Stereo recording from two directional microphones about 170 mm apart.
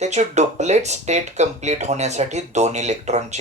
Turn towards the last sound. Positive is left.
turn(degrees=-45)  # may be behind; listen again after turning